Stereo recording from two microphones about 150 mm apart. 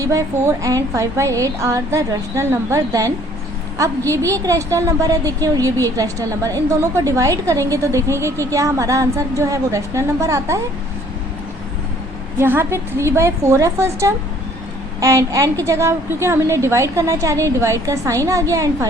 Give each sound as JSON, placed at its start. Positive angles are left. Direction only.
{"t": 0.0, "sound": "a woman's voice", "side_deg": -20}
{"t": 12.4, "sound": "a woman's voice", "side_deg": -15}